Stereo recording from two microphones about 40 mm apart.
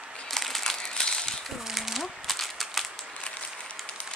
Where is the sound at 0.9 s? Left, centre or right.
Left.